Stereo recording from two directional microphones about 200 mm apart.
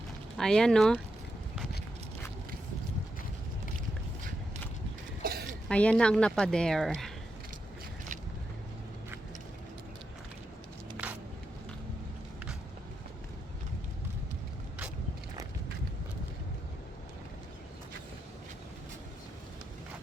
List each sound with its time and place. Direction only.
0.3 s speech: 5° left (ahead or behind)
5.2 s a sound: 50° right (ahead or behind)
5.6 s speech: 5° left (ahead or behind)
10.9 s vehicle: 10° right (ahead or behind)